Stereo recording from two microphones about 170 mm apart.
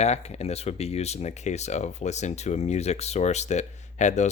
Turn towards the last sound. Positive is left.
turn(degrees=45)  # may be behind; listen again after turning